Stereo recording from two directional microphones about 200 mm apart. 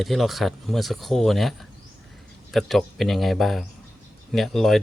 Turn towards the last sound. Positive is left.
turn(degrees=0)  # may be behind; listen again after turning